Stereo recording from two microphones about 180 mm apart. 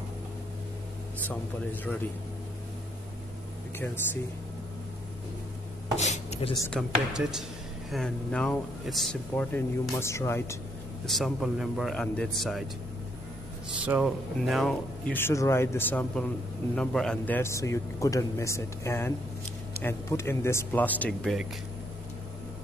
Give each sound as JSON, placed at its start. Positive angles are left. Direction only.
{"t": 3.7, "sound": "speech", "side_deg": 10}
{"t": 5.9, "sound": "chopping", "side_deg": 40}
{"t": 6.7, "sound": "speech", "side_deg": -5}
{"t": 11.1, "sound": "speech", "side_deg": 0}
{"t": 13.8, "sound": "speech", "side_deg": -5}
{"t": 15.1, "sound": "speech", "side_deg": 15}